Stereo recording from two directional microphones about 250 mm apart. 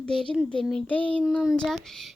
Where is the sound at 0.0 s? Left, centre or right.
Centre.